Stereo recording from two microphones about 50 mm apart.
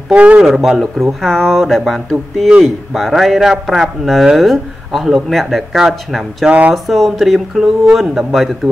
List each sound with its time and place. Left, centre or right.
0.4 s a man's voice: centre
6.4 s speech: right
6.7 s a man's voice: centre